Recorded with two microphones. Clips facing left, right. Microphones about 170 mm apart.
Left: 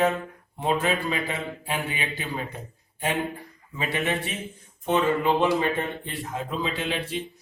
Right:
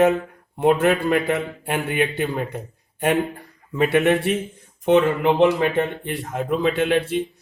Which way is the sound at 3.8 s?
65° right (ahead or behind).